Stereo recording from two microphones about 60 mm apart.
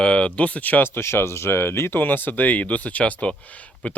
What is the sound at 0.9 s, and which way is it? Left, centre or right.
Speech, left.